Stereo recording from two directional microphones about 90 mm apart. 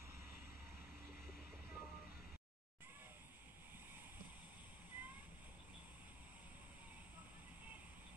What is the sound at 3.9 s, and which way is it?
Boat, 20° right (ahead or behind).